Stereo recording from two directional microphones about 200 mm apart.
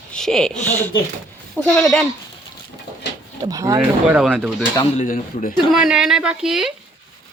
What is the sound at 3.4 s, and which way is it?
Speech, 15° right (ahead or behind).